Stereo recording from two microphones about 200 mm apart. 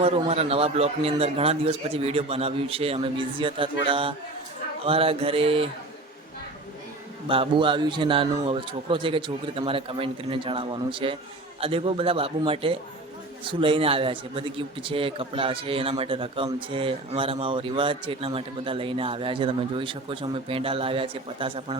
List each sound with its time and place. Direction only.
0.0 s a man's voice: 30° right (ahead or behind)
7.3 s a man's voice: 25° right (ahead or behind)